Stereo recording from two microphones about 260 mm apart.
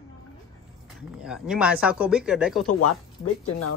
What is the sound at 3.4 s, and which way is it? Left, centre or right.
Speech, left.